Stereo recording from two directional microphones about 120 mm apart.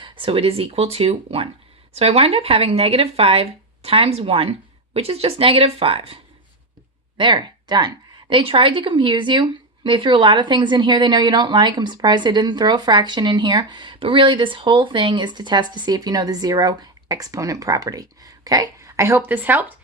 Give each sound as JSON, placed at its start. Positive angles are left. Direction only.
{"t": 0.0, "sound": "speech", "side_deg": -45}
{"t": 7.2, "sound": "a woman's voice", "side_deg": -40}